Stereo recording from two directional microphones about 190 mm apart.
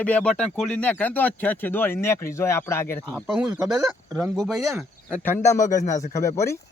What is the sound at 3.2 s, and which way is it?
Speech, 5° right (ahead or behind).